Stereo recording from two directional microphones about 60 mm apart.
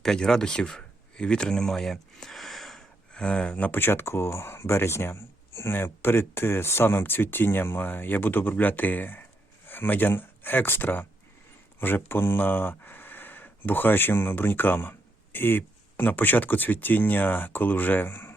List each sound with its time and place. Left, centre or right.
0.0 s speech: centre
3.1 s speech: centre
3.7 s speech: left